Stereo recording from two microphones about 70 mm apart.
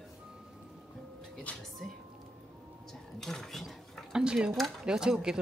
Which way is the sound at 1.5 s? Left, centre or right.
Centre.